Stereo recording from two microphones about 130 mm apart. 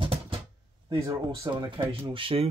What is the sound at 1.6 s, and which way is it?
Speech, 40° right (ahead or behind).